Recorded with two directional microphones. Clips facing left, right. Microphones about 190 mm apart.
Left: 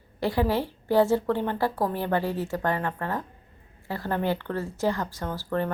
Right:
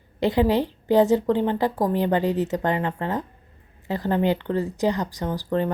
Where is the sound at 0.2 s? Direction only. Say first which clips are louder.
Right 5 dB; 20° right (ahead or behind).